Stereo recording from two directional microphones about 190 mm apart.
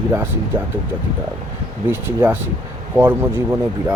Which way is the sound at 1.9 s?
10° right (ahead or behind).